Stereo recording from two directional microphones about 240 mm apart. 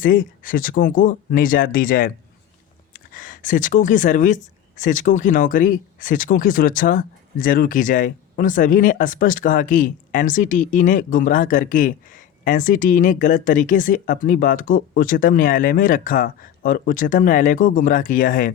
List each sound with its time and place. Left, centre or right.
0.0 s speech: left